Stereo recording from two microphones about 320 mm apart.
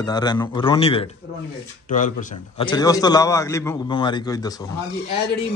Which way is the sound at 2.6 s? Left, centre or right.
Centre.